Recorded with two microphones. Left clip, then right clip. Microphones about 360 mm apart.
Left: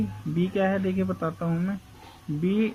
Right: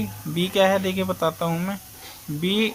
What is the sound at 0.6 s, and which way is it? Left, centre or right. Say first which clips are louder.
Speech: right 7 dB; centre.